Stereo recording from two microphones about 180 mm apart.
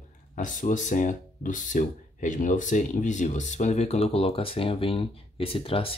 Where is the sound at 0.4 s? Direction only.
45° left (ahead or behind).